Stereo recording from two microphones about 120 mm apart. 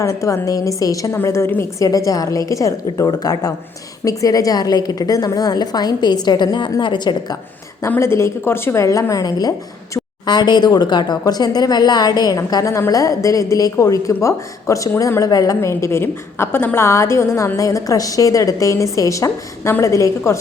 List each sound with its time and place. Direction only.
0.0 s a woman's voice: 25° left (ahead or behind)
7.8 s a woman's voice: 20° left (ahead or behind)